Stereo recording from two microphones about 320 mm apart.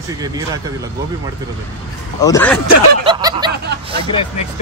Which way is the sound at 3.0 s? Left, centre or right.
Centre.